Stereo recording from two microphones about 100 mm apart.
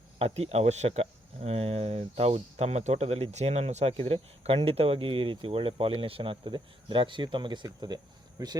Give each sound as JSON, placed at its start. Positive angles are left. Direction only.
{"t": 0.2, "sound": "speech", "side_deg": -90}